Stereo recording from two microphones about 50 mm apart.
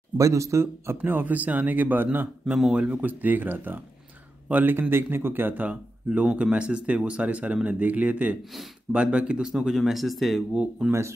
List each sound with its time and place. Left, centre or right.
0.2 s speech: right
1.0 s speech: right
4.7 s speech: right
6.3 s speech: right
9.5 s speech: centre
10.5 s speech: centre
10.9 s speech: right